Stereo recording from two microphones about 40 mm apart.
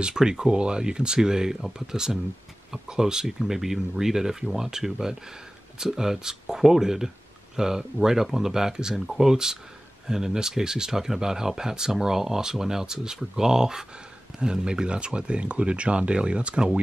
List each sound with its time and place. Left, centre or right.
0.0 s speech: centre